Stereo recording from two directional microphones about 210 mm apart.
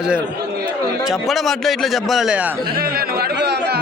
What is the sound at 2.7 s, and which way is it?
Music, 45° right (ahead or behind).